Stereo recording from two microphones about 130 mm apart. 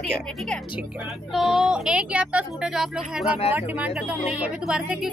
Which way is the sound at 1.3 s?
Centre (ahead or behind).